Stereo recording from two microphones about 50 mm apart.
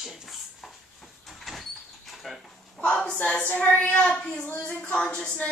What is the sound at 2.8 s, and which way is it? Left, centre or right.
A woman's voice, left.